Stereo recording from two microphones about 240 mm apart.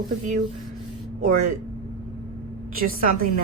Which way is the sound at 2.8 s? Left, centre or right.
Right.